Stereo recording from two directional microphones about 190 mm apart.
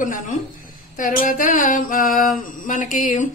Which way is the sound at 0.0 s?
40° left (ahead or behind).